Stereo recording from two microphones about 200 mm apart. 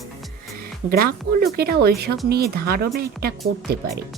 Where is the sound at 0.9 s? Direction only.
50° right (ahead or behind).